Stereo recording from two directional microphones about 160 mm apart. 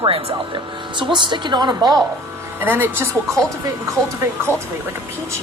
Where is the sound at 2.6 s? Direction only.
15° right (ahead or behind).